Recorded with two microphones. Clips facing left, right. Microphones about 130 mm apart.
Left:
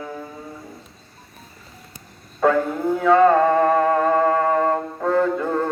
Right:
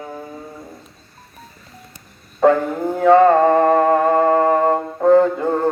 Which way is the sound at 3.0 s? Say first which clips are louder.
Right 4 dB; 30° right (ahead or behind).